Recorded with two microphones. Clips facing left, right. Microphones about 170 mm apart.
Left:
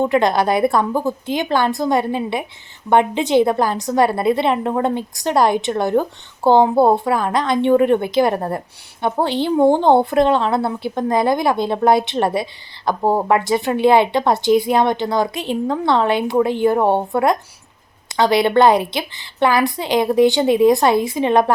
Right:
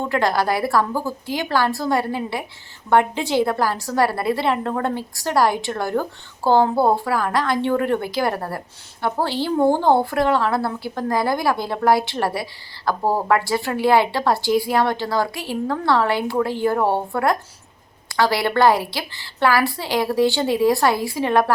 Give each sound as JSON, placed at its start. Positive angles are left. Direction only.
{"t": 0.0, "sound": "a woman's voice", "side_deg": 20}